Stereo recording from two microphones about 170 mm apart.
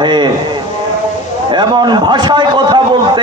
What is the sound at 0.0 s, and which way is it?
Speech, 25° right (ahead or behind).